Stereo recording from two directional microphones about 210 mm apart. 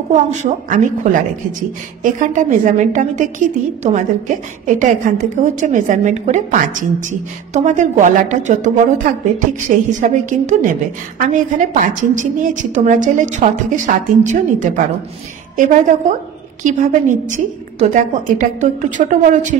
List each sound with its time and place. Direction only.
0.3 s a woman's voice: 35° right (ahead or behind)